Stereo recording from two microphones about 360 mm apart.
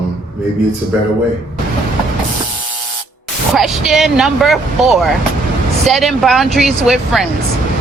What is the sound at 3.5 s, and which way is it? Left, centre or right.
Speech, centre.